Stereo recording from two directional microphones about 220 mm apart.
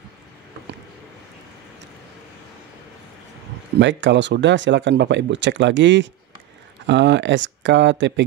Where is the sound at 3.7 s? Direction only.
55° right (ahead or behind).